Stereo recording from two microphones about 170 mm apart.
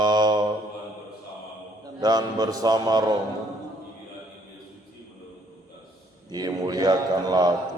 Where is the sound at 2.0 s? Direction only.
25° right (ahead or behind).